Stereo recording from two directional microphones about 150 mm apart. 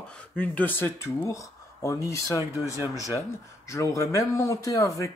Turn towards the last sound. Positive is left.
turn(degrees=20)  # may be behind; listen again after turning